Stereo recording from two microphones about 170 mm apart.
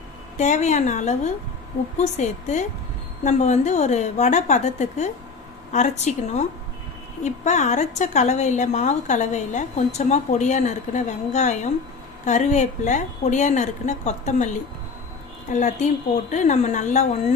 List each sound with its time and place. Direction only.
0.3 s a woman's voice: 45° left (ahead or behind)